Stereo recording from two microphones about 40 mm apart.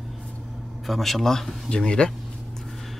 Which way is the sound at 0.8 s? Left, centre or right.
Centre.